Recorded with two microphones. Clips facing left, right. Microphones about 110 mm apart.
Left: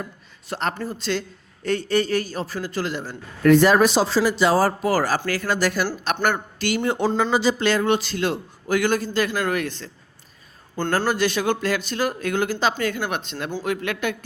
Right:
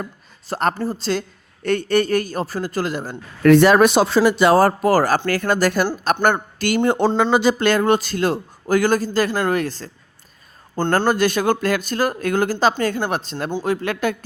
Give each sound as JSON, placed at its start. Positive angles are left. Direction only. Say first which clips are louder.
{"t": 0.0, "sound": "speech", "louder": "right 3 dB", "side_deg": -40}
{"t": 1.6, "sound": "a man's voice", "louder": "right 3 dB", "side_deg": -60}
{"t": 3.4, "sound": "a man's voice", "louder": "right 3 dB", "side_deg": -75}
{"t": 7.2, "sound": "speech", "louder": "right 4 dB", "side_deg": -65}
{"t": 11.0, "sound": "speech", "louder": "right 4 dB", "side_deg": -45}
{"t": 13.5, "sound": "speech", "louder": "right 4 dB", "side_deg": -25}
{"t": 13.8, "sound": "speech", "louder": "right 4 dB", "side_deg": -40}